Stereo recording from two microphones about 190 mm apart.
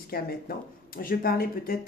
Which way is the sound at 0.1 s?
50° left (ahead or behind).